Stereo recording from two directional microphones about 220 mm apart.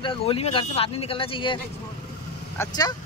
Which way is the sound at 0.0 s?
25° left (ahead or behind).